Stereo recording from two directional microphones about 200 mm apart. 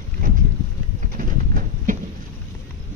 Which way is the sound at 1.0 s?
45° right (ahead or behind).